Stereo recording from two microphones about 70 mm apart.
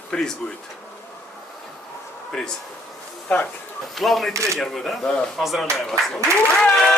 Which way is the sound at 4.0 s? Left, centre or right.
Centre.